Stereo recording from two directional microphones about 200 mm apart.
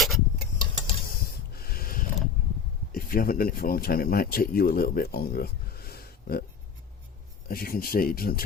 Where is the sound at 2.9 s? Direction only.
45° left (ahead or behind).